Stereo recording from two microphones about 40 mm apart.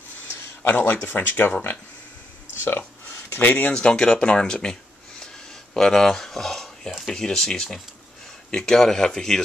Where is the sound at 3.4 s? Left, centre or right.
Left.